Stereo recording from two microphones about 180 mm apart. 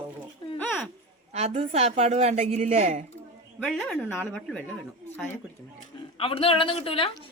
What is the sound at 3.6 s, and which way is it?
A woman's voice, 5° left (ahead or behind).